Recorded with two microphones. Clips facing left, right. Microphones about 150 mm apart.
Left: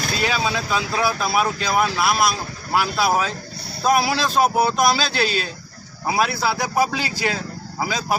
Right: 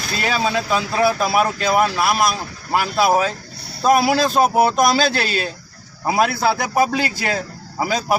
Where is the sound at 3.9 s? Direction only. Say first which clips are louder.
Right 4 dB; 50° right (ahead or behind).